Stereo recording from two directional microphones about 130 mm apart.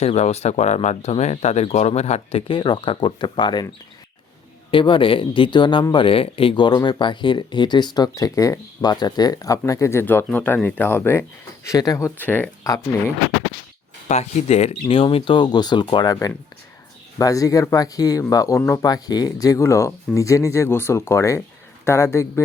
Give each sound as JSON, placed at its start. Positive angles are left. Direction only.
{"t": 0.0, "sound": "speech", "side_deg": 55}
{"t": 2.5, "sound": "speech", "side_deg": 40}
{"t": 4.7, "sound": "speech", "side_deg": 40}
{"t": 14.1, "sound": "speech", "side_deg": 55}
{"t": 17.2, "sound": "speech", "side_deg": 25}